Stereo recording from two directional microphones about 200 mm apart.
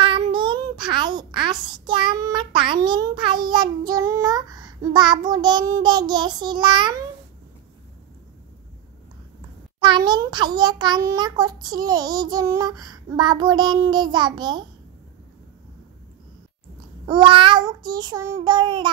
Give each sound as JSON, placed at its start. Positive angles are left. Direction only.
{"t": 0.0, "sound": "a child's voice", "side_deg": -25}
{"t": 9.8, "sound": "a child's voice", "side_deg": -25}
{"t": 17.0, "sound": "a child's voice", "side_deg": -25}